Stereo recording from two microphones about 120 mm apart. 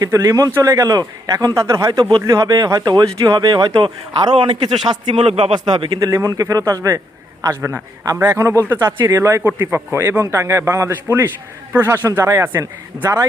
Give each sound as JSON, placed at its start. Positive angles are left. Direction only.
{"t": 0.0, "sound": "a man's voice", "side_deg": -25}
{"t": 5.5, "sound": "a man's voice", "side_deg": -35}
{"t": 9.4, "sound": "a man's voice", "side_deg": -10}